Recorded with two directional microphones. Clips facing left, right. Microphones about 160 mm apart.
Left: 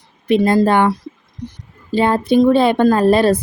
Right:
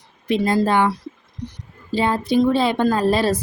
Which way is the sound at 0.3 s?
55° left (ahead or behind).